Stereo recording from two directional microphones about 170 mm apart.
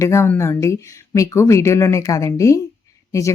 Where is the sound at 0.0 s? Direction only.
15° left (ahead or behind).